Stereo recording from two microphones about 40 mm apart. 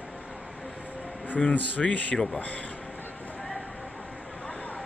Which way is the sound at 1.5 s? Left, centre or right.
Left.